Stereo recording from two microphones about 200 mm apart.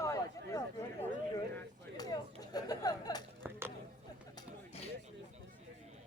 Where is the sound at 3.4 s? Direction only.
10° right (ahead or behind).